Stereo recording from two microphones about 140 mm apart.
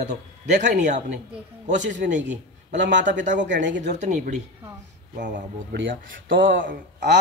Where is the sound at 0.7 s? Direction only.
60° right (ahead or behind).